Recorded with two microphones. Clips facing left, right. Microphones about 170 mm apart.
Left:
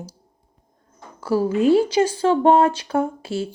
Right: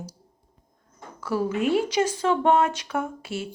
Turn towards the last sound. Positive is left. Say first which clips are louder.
# left 7 dB
turn(degrees=30)  # may be behind; listen again after turning